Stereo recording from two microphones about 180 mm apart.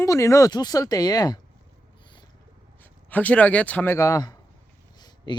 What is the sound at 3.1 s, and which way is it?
Speech, 10° left (ahead or behind).